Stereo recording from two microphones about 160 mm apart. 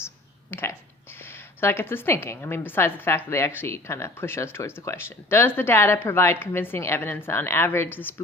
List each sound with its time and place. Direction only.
0.5 s a woman's voice: 15° left (ahead or behind)